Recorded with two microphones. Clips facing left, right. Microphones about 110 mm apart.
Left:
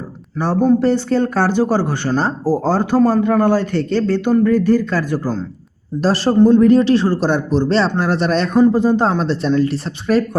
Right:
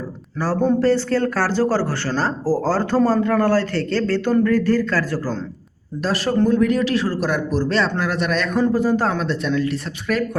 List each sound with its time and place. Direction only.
0.8 s speech: 20° left (ahead or behind)
6.0 s speech: 35° left (ahead or behind)